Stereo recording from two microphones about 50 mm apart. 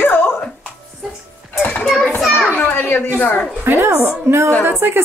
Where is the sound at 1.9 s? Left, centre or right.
Centre.